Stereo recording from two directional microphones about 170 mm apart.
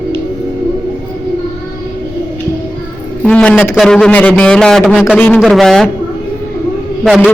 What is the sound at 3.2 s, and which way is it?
A man's voice, 5° left (ahead or behind).